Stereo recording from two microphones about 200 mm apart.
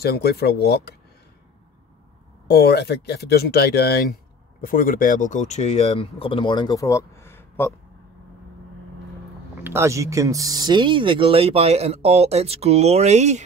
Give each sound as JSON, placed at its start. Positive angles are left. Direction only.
{"t": 0.0, "sound": "speech", "side_deg": 55}
{"t": 2.4, "sound": "speech", "side_deg": 55}
{"t": 9.6, "sound": "speech", "side_deg": -10}